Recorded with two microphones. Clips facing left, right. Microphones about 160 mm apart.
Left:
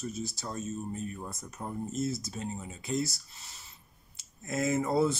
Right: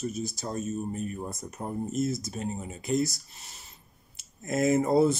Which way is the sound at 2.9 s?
15° right (ahead or behind).